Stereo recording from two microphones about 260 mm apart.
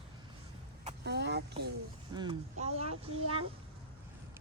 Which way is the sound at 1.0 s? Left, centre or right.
Right.